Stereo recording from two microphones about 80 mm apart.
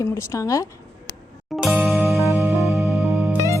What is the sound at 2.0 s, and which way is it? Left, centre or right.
Music, right.